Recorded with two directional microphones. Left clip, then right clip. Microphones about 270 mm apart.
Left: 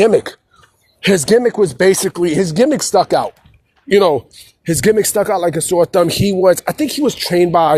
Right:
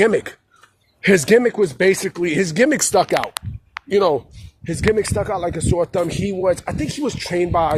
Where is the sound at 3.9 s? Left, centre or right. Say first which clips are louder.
Left 5 dB; left.